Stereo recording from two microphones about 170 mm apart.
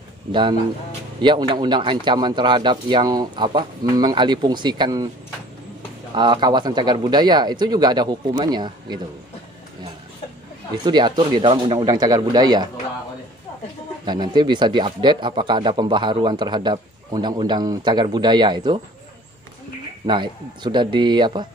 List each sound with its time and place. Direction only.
0.3 s a man's voice: 30° right (ahead or behind)
6.1 s a man's voice: 25° right (ahead or behind)
10.8 s a man's voice: 25° right (ahead or behind)
14.0 s a man's voice: 25° right (ahead or behind)
20.1 s a man's voice: 30° right (ahead or behind)